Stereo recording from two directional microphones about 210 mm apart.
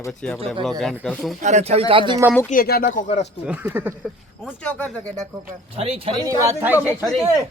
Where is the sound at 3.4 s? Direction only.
5° right (ahead or behind).